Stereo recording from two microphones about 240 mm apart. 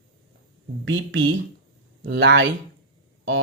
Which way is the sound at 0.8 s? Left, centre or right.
Right.